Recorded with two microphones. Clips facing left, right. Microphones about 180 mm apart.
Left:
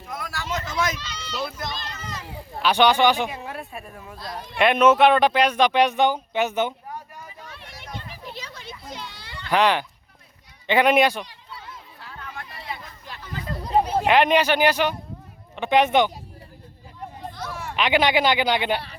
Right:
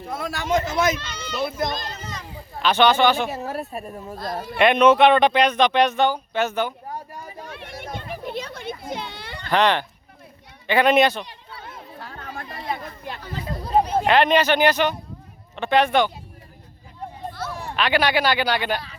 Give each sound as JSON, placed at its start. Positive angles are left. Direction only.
{"t": 0.1, "sound": "speech", "side_deg": -25}
{"t": 0.9, "sound": "speech", "side_deg": -55}
{"t": 1.6, "sound": "a child's voice", "side_deg": -45}
{"t": 2.6, "sound": "speech", "side_deg": 10}
{"t": 3.2, "sound": "speech", "side_deg": -40}
{"t": 4.2, "sound": "a child's voice", "side_deg": -50}
{"t": 4.5, "sound": "speech", "side_deg": 5}
{"t": 7.1, "sound": "a sound", "side_deg": -35}
{"t": 7.4, "sound": "children playing", "side_deg": -55}
{"t": 9.5, "sound": "speech", "side_deg": 10}
{"t": 11.3, "sound": "chatter", "side_deg": -55}
{"t": 13.7, "sound": "speech", "side_deg": 10}
{"t": 17.7, "sound": "speech", "side_deg": 20}